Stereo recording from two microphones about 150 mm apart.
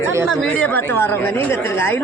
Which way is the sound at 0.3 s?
10° left (ahead or behind).